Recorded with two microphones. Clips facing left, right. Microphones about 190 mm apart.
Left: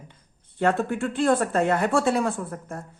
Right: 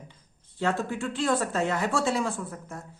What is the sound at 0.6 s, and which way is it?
Speech, 55° left (ahead or behind).